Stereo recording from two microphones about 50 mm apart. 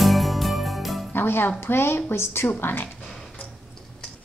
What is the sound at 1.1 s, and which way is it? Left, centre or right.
Music, left.